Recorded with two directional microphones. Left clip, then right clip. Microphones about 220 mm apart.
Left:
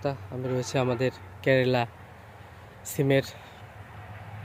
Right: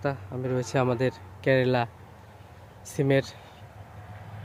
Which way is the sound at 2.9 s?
Centre (ahead or behind).